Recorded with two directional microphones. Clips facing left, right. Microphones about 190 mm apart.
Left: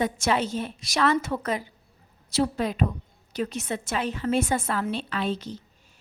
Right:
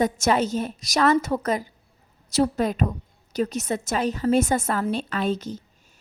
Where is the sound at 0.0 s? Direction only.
45° right (ahead or behind).